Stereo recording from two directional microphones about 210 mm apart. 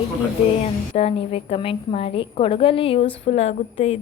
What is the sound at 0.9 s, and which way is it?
A woman's voice, 30° left (ahead or behind).